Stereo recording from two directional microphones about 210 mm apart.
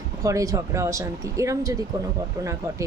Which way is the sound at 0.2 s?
15° right (ahead or behind).